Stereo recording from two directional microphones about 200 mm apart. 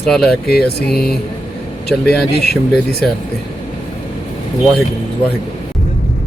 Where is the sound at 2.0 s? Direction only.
55° left (ahead or behind).